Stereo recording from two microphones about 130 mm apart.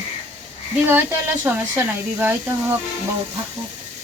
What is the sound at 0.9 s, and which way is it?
Speech, 15° right (ahead or behind).